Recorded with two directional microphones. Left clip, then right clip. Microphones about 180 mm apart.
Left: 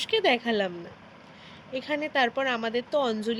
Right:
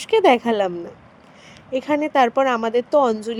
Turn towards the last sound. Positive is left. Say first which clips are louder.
# right 9 dB
turn(degrees=-40)  # may be behind; listen again after turning